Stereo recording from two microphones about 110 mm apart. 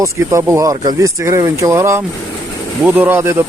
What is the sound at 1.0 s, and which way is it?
Speech, 30° right (ahead or behind).